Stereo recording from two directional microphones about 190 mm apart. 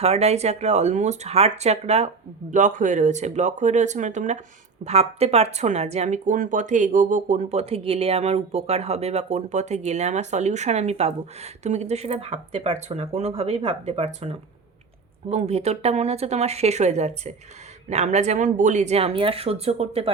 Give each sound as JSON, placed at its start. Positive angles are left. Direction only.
{"t": 0.0, "sound": "speech", "side_deg": -35}